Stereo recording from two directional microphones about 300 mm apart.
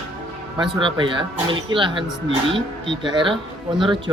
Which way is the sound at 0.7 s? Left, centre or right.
Centre.